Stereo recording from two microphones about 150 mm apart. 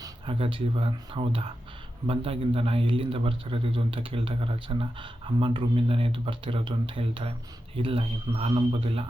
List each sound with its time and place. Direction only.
0.3 s a man's voice: 35° right (ahead or behind)